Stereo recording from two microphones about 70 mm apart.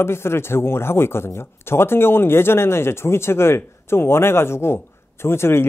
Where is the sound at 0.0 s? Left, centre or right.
Left.